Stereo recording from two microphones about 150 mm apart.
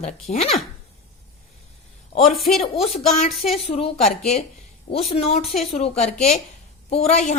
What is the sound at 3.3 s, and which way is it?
Speech, centre (ahead or behind).